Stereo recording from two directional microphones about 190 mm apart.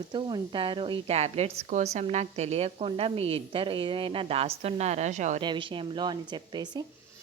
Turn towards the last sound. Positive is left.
turn(degrees=-20)  # may be behind; listen again after turning